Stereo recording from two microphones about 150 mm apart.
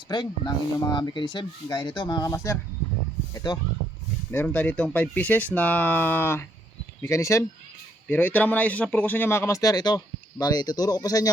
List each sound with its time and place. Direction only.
0.1 s a man's voice: 25° left (ahead or behind)
4.3 s a man's voice: 15° left (ahead or behind)